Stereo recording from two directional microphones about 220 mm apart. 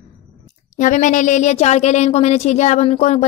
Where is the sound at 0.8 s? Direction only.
35° left (ahead or behind).